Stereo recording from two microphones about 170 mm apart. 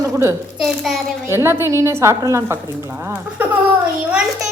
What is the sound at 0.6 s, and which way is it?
Speech, centre (ahead or behind).